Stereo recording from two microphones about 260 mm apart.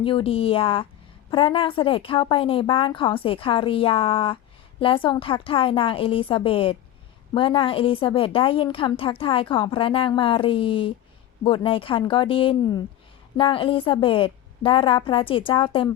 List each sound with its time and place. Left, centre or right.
0.0 s a woman's voice: left